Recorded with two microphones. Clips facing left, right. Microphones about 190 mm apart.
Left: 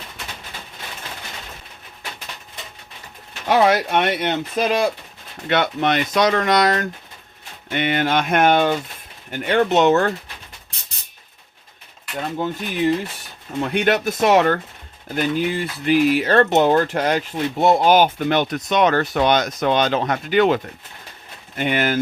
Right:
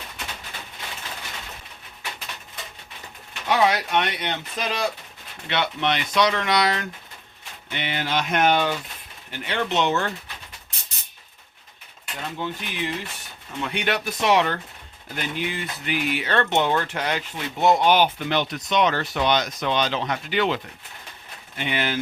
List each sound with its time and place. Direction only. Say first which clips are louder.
3.5 s speech: left 4 dB; 50° left (ahead or behind)
12.1 s speech: left 6 dB; 45° left (ahead or behind)